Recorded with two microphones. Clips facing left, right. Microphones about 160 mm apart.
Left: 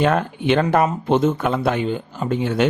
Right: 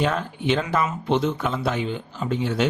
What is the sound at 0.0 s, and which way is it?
Speech, 55° left (ahead or behind).